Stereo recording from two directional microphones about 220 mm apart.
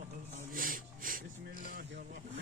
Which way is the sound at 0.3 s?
40° right (ahead or behind).